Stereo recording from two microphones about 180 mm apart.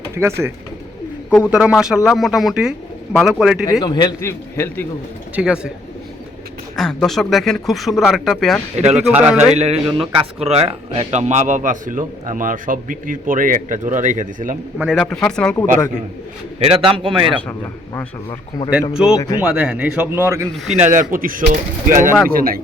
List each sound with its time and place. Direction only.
0.2 s speech: 15° right (ahead or behind)
3.7 s a man's voice: 25° left (ahead or behind)
5.3 s speech: 5° right (ahead or behind)
6.7 s speech: centre (ahead or behind)
9.6 s a man's voice: 35° right (ahead or behind)
14.8 s speech: centre (ahead or behind)
16.6 s a man's voice: 35° right (ahead or behind)
18.7 s speech: 5° right (ahead or behind)
19.1 s speech: 20° left (ahead or behind)
19.4 s speech: 5° right (ahead or behind)
20.7 s a man's voice: 45° right (ahead or behind)